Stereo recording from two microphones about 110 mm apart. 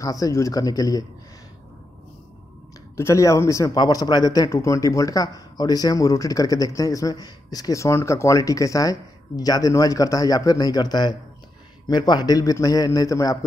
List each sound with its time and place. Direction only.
0.0 s a man's voice: 30° left (ahead or behind)
3.0 s a man's voice: 25° left (ahead or behind)